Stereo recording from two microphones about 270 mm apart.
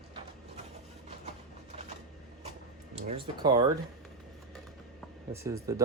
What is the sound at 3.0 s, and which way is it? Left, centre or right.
Speech, centre.